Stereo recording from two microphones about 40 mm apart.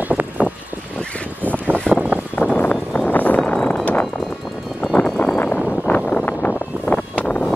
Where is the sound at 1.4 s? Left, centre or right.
Right.